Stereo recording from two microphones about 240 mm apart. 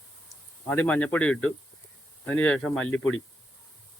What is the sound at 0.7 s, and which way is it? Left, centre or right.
Speech, centre.